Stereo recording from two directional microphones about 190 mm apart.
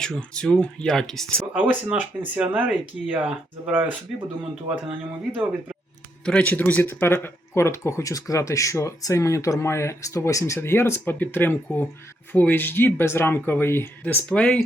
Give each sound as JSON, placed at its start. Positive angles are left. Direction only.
{"t": 0.0, "sound": "speech", "side_deg": 5}
{"t": 1.5, "sound": "speech", "side_deg": -10}
{"t": 6.2, "sound": "speech", "side_deg": 5}